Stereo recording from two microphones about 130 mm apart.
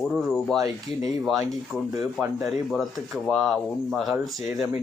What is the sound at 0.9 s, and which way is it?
Speech, 55° left (ahead or behind).